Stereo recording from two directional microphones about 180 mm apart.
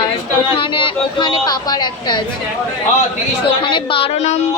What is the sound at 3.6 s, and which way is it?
Speech, 25° left (ahead or behind).